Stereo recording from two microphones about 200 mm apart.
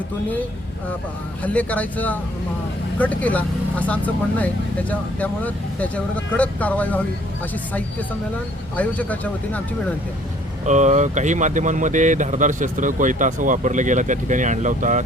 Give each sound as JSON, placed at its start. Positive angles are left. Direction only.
{"t": 1.5, "sound": "speech", "side_deg": 10}
{"t": 8.7, "sound": "speech", "side_deg": 5}
{"t": 10.7, "sound": "speech", "side_deg": -35}